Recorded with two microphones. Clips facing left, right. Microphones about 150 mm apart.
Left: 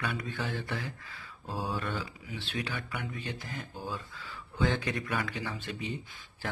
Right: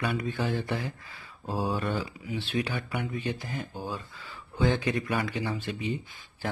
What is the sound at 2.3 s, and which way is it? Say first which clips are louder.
Speech: right 7 dB; 15° right (ahead or behind).